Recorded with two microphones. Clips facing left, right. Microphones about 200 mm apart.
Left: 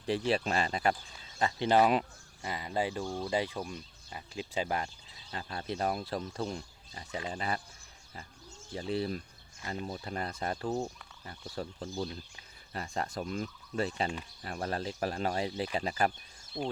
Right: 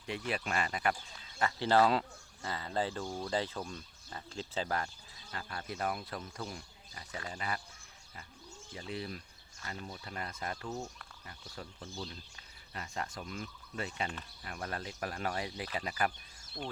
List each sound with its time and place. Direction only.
0.3 s speech: 30° left (ahead or behind)
7.3 s speech: 30° left (ahead or behind)
8.7 s speech: 35° left (ahead or behind)
12.7 s speech: 40° left (ahead or behind); by 16.7 s 25° left (ahead or behind)